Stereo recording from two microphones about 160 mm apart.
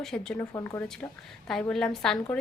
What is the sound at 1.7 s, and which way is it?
Speech, 5° left (ahead or behind).